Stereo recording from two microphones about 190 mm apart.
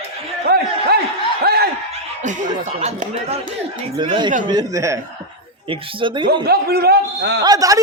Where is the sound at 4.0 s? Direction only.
25° right (ahead or behind).